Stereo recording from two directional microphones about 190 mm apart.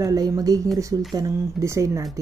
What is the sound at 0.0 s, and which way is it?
Speech, 15° right (ahead or behind).